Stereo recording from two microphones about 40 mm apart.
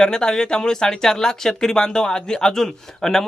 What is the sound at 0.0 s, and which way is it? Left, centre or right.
Speech, centre.